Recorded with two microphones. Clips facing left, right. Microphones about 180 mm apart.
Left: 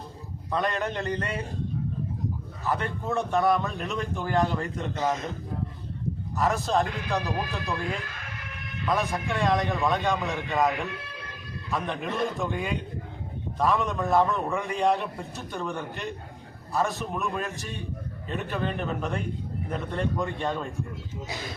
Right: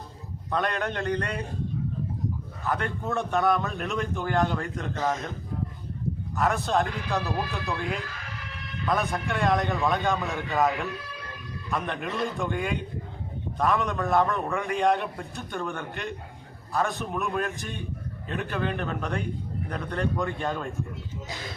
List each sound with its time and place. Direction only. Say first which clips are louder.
0.5 s a man's voice: even; centre (ahead or behind)
2.6 s a man's voice: even; centre (ahead or behind)
6.3 s a man's voice: even; centre (ahead or behind)
7.2 s speech: right 2 dB; 15° left (ahead or behind)
7.5 s a man's voice: even; centre (ahead or behind)
11.7 s a man's voice: even; centre (ahead or behind)